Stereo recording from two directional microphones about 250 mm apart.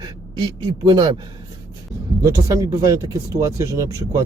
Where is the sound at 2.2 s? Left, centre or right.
Centre.